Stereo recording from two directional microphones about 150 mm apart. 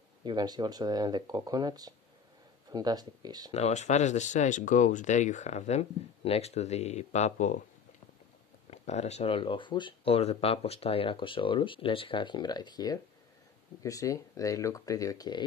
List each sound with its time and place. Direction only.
0.2 s speech: 30° right (ahead or behind)
3.5 s speech: 50° left (ahead or behind)
8.6 s speech: 45° left (ahead or behind); by 15.4 s 25° left (ahead or behind)